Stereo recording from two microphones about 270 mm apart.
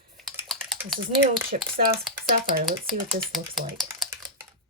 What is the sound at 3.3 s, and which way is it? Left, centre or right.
Speech, centre.